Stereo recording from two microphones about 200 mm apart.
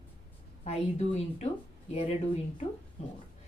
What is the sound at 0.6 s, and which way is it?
Speech, 30° left (ahead or behind).